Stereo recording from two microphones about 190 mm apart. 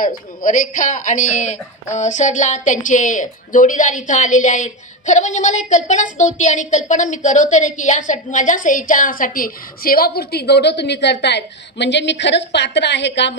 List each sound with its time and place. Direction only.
0.0 s a woman's voice: 45° left (ahead or behind); by 13.3 s 65° left (ahead or behind)